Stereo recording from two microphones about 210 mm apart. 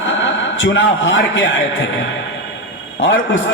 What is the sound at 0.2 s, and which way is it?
A man's voice, 65° left (ahead or behind).